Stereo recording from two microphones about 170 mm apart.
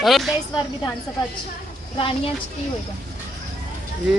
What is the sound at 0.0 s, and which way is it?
Speech, centre (ahead or behind).